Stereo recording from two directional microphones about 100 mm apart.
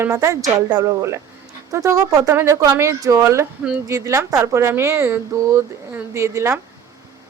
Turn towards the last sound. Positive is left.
turn(degrees=-30)  # may be behind; listen again after turning